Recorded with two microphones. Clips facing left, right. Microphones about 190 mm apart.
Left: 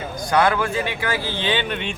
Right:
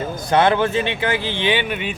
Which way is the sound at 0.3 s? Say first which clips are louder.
Right 3 dB; 25° right (ahead or behind).